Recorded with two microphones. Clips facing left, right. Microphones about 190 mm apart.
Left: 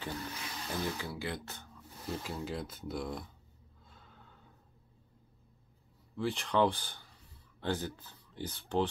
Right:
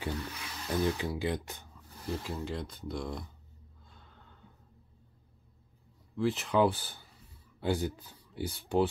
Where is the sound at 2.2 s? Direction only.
Centre (ahead or behind).